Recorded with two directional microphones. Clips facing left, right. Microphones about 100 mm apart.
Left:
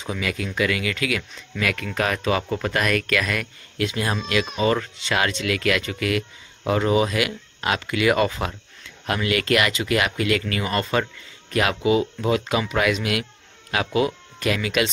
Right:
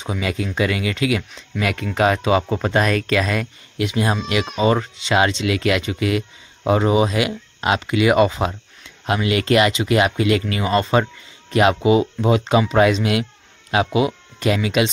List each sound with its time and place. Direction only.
0.0 s speech: 25° right (ahead or behind)